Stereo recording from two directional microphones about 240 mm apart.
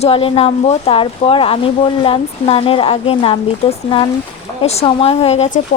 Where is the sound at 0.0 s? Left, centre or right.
Left.